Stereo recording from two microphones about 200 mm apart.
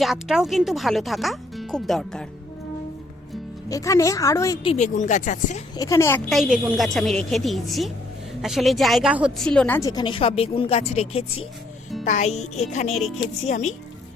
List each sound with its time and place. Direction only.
0.0 s speech: centre (ahead or behind)
3.7 s a woman's voice: 15° left (ahead or behind)
4.6 s speech: 35° left (ahead or behind)
5.7 s a woman's voice: 15° left (ahead or behind)
12.0 s speech: 35° left (ahead or behind)